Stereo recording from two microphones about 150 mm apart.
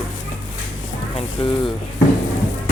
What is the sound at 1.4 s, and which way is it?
Speech, 40° left (ahead or behind).